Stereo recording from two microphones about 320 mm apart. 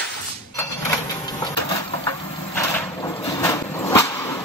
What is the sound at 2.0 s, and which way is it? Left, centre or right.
Vehicle, centre.